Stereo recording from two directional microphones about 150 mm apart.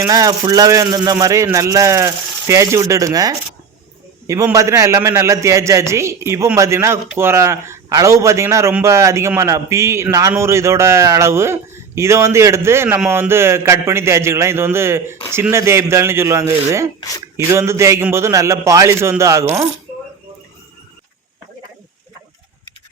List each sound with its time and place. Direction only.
0.0 s speech: 25° right (ahead or behind)
4.5 s a man's voice: 20° right (ahead or behind)